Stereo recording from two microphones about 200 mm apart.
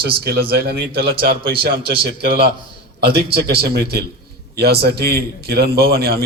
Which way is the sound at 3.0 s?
55° right (ahead or behind).